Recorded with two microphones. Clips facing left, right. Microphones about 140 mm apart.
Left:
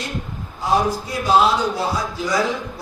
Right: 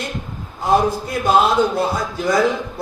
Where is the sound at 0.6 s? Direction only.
55° right (ahead or behind).